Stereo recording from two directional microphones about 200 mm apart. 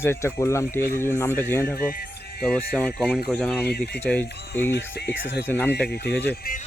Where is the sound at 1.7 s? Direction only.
50° left (ahead or behind).